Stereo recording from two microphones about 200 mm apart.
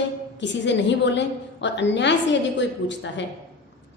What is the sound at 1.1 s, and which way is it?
A woman's voice, 60° left (ahead or behind).